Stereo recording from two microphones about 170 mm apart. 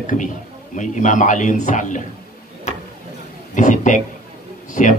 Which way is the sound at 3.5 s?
50° left (ahead or behind).